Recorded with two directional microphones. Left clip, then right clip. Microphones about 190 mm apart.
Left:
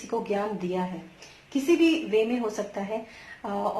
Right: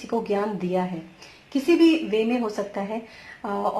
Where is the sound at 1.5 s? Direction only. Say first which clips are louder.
Right 4 dB; 30° right (ahead or behind).